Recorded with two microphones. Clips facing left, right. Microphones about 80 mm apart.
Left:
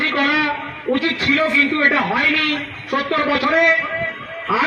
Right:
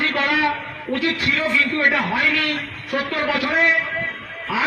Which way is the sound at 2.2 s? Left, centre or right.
Right.